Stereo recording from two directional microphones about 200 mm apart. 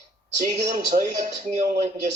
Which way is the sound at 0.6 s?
40° right (ahead or behind).